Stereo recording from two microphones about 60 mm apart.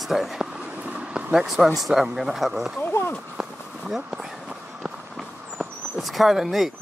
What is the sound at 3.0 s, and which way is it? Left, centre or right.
Horse, left.